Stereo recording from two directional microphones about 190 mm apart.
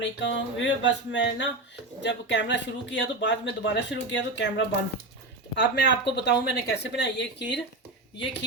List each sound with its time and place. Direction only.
0.0 s speech: 70° left (ahead or behind)